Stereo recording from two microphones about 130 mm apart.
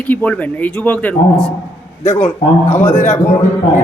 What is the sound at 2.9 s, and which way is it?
Speech, 65° left (ahead or behind).